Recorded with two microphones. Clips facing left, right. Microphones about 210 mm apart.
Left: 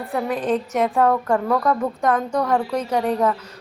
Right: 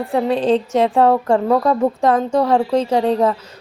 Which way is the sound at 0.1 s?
25° right (ahead or behind).